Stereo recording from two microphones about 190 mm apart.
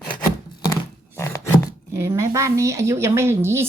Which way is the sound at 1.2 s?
15° left (ahead or behind).